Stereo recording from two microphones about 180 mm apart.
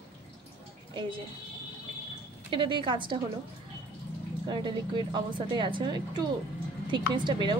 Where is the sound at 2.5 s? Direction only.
30° right (ahead or behind).